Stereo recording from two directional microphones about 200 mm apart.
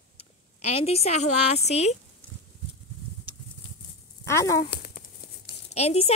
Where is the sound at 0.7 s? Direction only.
30° left (ahead or behind).